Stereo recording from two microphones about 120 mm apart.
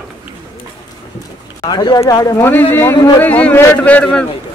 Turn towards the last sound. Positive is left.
turn(degrees=10)  # may be behind; listen again after turning